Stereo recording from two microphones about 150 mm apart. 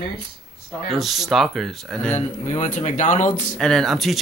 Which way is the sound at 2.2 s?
50° left (ahead or behind).